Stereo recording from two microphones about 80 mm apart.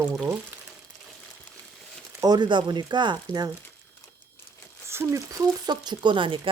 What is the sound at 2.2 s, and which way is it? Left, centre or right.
Speech, right.